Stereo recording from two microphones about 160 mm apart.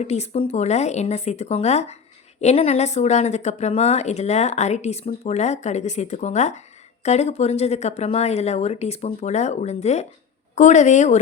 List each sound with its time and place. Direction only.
0.0 s a woman's voice: 40° left (ahead or behind)